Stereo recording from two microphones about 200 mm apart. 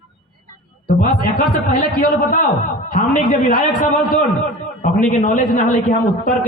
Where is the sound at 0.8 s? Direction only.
45° left (ahead or behind).